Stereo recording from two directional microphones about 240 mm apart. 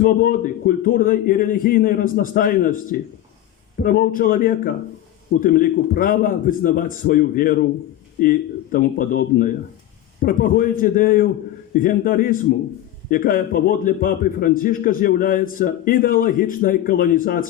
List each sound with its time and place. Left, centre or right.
0.0 s a man's voice: left